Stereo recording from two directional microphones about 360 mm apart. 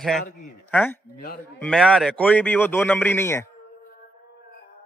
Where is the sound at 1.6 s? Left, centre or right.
Centre.